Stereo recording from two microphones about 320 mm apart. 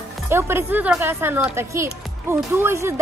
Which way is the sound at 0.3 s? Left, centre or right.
Centre.